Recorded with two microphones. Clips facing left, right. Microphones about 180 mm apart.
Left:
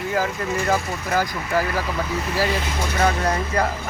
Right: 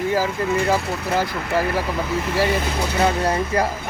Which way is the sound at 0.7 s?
25° right (ahead or behind).